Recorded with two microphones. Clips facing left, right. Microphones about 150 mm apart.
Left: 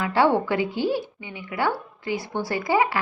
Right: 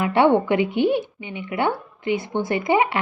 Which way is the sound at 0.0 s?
20° right (ahead or behind).